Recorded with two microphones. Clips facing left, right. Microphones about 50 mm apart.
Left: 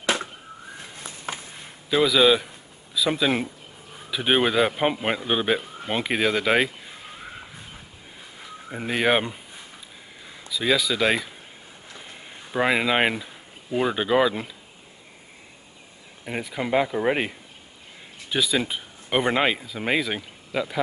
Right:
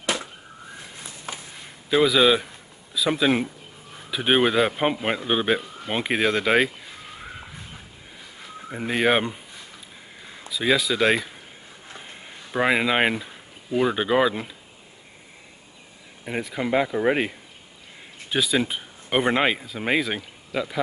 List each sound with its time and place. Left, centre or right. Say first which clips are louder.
1.3 s a sound: left 3 dB; left
2.0 s a man's voice: even; centre
8.6 s a man's voice: right 1 dB; centre
12.3 s speech: right 1 dB; centre
16.3 s a man's voice: right 1 dB; centre
18.3 s speech: right 1 dB; centre